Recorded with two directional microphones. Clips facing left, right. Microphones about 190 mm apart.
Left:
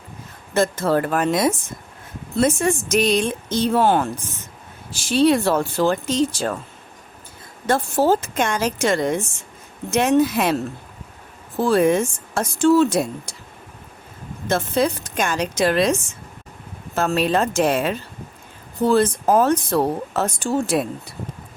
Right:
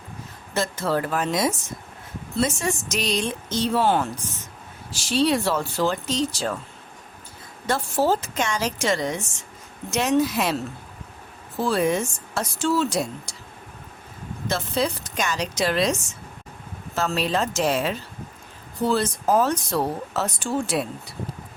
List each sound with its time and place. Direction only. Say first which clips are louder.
0.5 s speech: left 6 dB; 50° left (ahead or behind)
7.7 s speech: left 4 dB; 50° left (ahead or behind)
11.6 s speech: left 5 dB; 50° left (ahead or behind)
14.4 s speech: left 5 dB; 55° left (ahead or behind)